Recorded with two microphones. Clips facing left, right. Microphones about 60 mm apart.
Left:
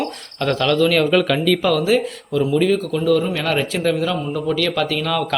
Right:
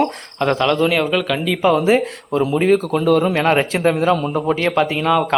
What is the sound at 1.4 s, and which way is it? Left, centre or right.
Speech, centre.